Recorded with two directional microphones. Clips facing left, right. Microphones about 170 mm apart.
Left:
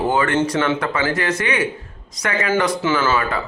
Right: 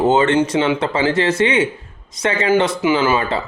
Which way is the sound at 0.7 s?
25° right (ahead or behind).